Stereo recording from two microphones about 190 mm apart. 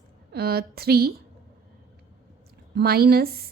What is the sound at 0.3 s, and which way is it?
Speech, 55° right (ahead or behind).